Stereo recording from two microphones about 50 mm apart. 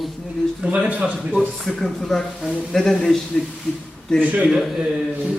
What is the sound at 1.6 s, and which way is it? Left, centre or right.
A man's voice, centre.